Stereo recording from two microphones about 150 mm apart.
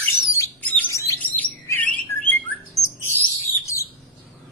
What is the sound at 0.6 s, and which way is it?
Bird, 10° left (ahead or behind).